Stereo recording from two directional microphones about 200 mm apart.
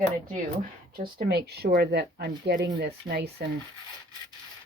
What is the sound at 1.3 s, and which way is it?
Speech, 55° right (ahead or behind).